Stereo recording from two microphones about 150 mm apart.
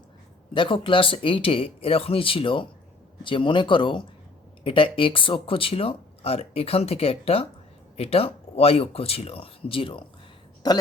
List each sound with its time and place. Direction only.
0.5 s speech: 35° left (ahead or behind)